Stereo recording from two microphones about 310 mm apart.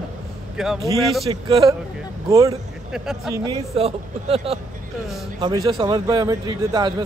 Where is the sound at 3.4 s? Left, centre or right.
Centre.